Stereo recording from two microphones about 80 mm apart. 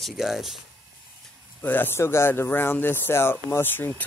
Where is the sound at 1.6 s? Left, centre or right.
Left.